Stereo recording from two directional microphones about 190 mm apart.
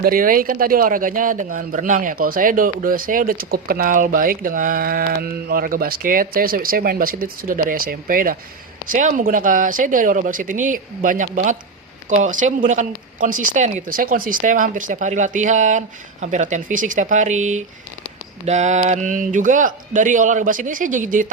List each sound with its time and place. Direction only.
0.0 s a man's voice: 45° right (ahead or behind)